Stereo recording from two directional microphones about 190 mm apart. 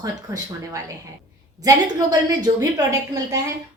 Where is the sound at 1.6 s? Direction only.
20° right (ahead or behind).